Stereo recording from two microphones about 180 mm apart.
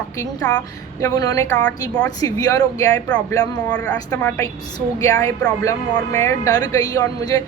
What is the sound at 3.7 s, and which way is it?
A woman's voice, 5° left (ahead or behind).